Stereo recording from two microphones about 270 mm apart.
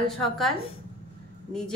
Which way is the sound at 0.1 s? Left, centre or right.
Centre.